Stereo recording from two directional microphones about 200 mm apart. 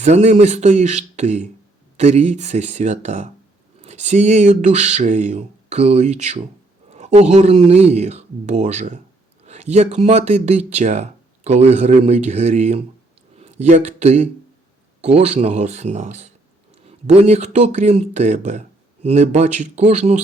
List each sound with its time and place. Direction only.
0.0 s speech: 35° right (ahead or behind)